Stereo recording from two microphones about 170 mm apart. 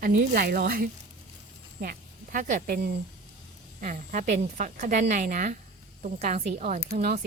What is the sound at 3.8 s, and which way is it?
A woman's voice, 50° right (ahead or behind).